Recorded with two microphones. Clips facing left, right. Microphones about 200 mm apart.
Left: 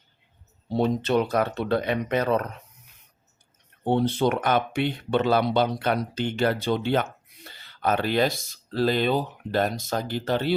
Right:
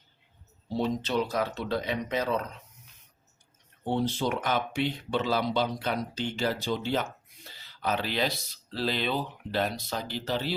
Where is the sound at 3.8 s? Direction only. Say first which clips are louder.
Left 6 dB; 60° left (ahead or behind).